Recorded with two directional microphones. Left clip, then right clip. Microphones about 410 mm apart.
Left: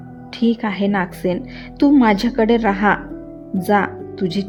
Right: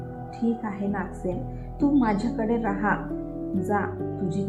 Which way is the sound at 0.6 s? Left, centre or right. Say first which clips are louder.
Left 11 dB; left.